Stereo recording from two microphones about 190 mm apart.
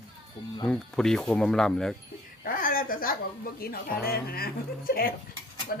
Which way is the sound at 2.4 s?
50° left (ahead or behind).